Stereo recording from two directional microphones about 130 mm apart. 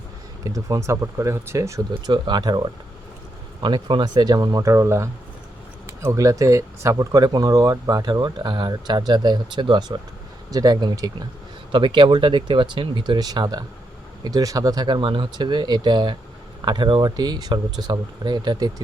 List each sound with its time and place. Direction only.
0.4 s speech: 25° right (ahead or behind)